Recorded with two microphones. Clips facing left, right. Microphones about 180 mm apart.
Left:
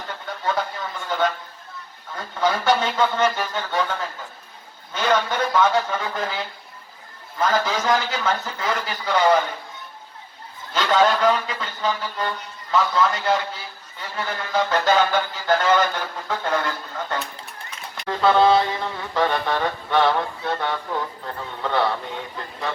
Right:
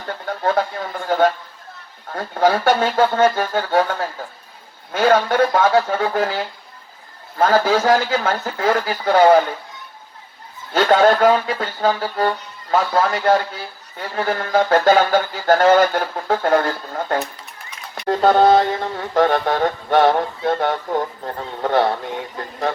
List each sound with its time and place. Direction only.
0.3 s a sound: 55° right (ahead or behind)
2.1 s speech: 55° right (ahead or behind)
7.6 s speech: 55° right (ahead or behind)
10.7 s speech: 50° right (ahead or behind)